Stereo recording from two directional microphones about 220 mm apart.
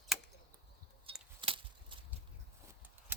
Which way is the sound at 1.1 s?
25° right (ahead or behind).